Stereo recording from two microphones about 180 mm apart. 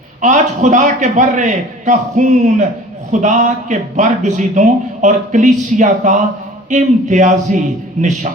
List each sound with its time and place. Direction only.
0.2 s speech: 45° right (ahead or behind)